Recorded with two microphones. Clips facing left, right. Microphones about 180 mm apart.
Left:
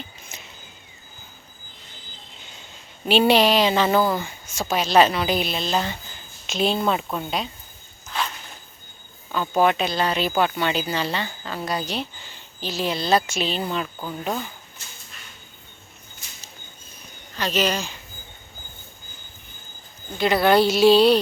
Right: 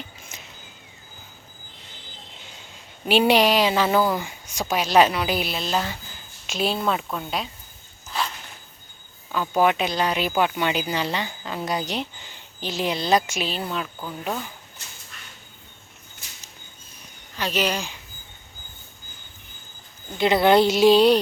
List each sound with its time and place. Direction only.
3.1 s speech: 10° right (ahead or behind)
9.3 s speech: 10° right (ahead or behind)
13.5 s speech: centre (ahead or behind)
17.3 s speech: 10° right (ahead or behind)
20.1 s a woman's voice: 20° right (ahead or behind)